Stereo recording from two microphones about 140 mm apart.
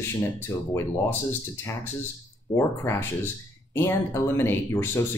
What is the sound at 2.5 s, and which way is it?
Speech, 20° left (ahead or behind).